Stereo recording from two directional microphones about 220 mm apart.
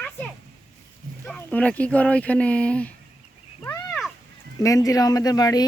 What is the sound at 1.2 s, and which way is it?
Speech, 5° left (ahead or behind).